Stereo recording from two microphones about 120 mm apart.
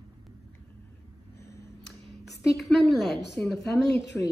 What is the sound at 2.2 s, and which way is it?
Speech, centre (ahead or behind).